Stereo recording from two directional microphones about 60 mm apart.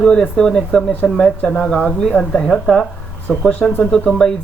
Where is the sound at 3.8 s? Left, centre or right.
Centre.